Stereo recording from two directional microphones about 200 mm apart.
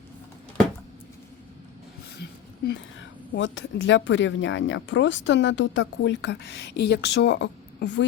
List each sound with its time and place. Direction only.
2.6 s a woman's voice: 60° left (ahead or behind)